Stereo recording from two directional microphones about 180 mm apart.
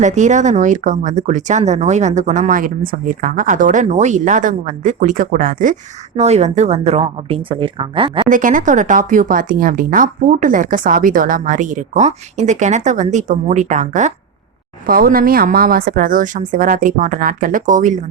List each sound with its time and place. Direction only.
0.0 s speech: 40° right (ahead or behind)
8.3 s speech: 45° right (ahead or behind)
14.8 s speech: 55° right (ahead or behind)